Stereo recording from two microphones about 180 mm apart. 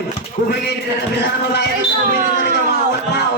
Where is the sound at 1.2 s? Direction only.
70° left (ahead or behind).